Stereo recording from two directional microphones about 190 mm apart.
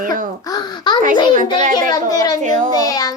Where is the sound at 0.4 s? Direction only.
20° left (ahead or behind).